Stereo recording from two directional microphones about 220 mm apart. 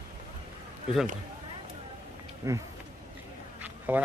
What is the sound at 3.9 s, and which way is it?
Speech, 5° right (ahead or behind).